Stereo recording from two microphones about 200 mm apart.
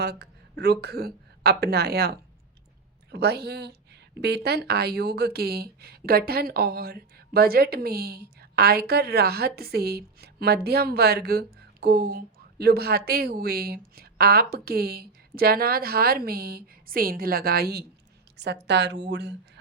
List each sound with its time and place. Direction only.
0.0 s a woman's voice: 55° right (ahead or behind)